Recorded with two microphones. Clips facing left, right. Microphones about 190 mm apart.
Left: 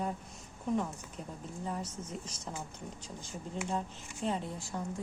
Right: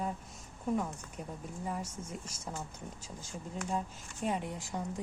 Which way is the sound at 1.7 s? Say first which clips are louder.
Even; 10° right (ahead or behind).